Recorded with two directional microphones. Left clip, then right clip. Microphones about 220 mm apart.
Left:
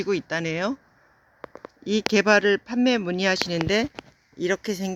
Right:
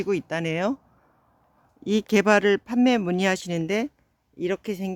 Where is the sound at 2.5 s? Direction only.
30° right (ahead or behind).